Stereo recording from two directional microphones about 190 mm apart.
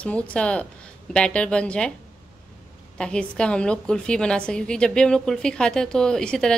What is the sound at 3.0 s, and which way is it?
A woman's voice, 5° left (ahead or behind).